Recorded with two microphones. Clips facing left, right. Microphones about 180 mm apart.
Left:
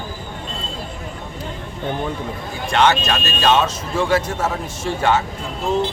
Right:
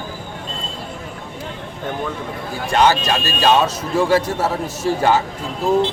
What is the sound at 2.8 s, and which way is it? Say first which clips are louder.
Speech: right 1 dB; 35° right (ahead or behind).